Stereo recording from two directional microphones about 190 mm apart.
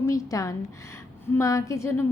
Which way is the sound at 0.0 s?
15° left (ahead or behind).